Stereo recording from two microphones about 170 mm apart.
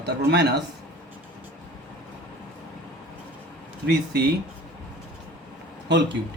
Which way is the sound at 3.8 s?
70° right (ahead or behind).